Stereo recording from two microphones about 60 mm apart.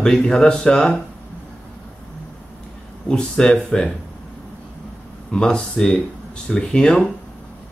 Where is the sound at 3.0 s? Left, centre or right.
Centre.